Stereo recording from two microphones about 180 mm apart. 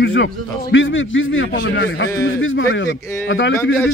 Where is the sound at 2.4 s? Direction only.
90° left.